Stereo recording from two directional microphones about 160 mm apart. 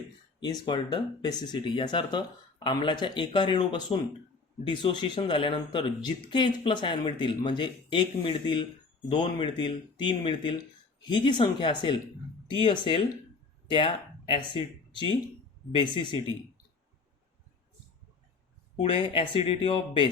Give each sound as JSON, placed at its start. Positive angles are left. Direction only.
{"t": 0.3, "sound": "speech", "side_deg": 30}
{"t": 15.7, "sound": "speech", "side_deg": 30}
{"t": 18.8, "sound": "speech", "side_deg": 35}